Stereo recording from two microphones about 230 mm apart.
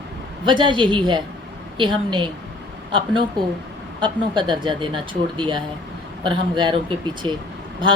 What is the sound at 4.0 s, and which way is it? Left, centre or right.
A woman's voice, right.